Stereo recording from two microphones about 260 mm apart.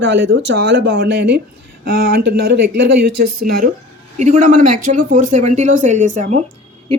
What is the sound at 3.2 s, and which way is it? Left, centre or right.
Speech, right.